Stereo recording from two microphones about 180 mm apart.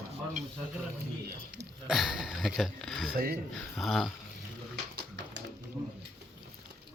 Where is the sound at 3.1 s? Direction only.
55° right (ahead or behind).